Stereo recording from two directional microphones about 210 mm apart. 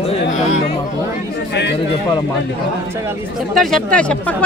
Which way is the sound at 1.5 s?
55° left (ahead or behind).